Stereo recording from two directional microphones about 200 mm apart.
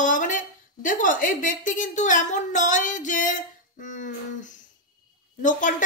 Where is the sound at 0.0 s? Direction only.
40° left (ahead or behind).